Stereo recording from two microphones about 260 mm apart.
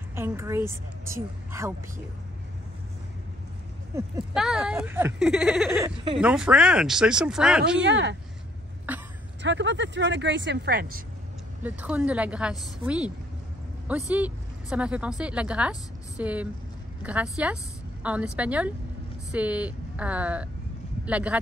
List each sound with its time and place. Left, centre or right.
0.1 s a woman's voice: centre
3.9 s speech: centre
7.8 s speech: right
8.9 s throat clearing: centre
9.4 s speech: right
11.6 s a woman's voice: centre